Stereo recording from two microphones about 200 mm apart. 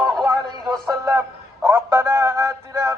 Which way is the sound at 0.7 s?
15° right (ahead or behind).